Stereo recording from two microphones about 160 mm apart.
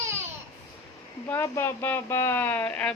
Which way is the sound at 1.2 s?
15° left (ahead or behind).